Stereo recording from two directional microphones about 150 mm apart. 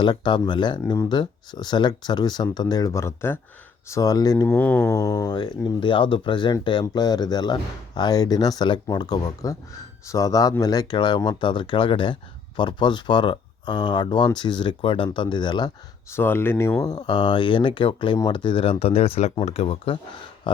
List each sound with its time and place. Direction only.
0.0 s speech: 30° left (ahead or behind)
4.4 s speech: 10° left (ahead or behind); by 15.7 s 30° left (ahead or behind)
16.0 s speech: 15° left (ahead or behind)
16.8 s speech: 30° left (ahead or behind)